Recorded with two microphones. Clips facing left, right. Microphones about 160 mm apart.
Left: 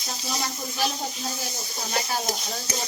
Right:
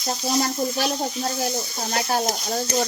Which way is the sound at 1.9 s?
55° right (ahead or behind).